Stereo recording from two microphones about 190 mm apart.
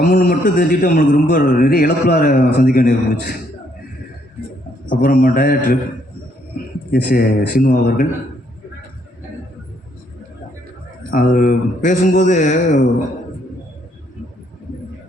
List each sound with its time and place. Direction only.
0.0 s a man's voice: 45° left (ahead or behind)
4.9 s a man's voice: 50° left (ahead or behind)
6.9 s a man's voice: 50° left (ahead or behind)
11.1 s a man's voice: 45° left (ahead or behind)